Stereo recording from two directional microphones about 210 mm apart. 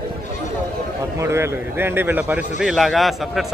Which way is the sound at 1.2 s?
10° right (ahead or behind).